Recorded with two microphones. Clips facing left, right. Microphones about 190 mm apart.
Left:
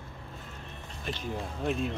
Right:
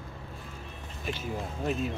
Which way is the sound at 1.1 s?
5° right (ahead or behind).